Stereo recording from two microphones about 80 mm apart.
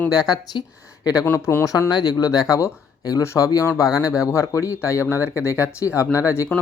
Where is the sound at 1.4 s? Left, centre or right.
Left.